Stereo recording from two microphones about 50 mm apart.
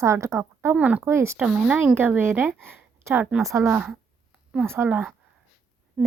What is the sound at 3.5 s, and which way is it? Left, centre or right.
Speech, right.